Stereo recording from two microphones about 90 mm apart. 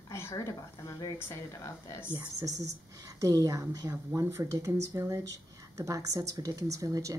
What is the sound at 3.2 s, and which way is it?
Speech, 40° right (ahead or behind).